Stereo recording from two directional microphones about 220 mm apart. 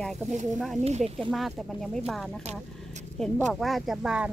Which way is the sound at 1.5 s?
Centre (ahead or behind).